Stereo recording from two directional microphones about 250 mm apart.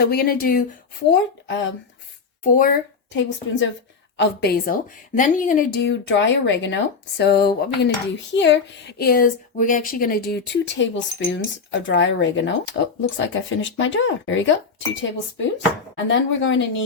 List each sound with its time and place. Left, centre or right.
0.0 s speech: left
1.1 s speech: left
2.4 s a woman's voice: left
3.2 s speech: left
16.0 s speech: left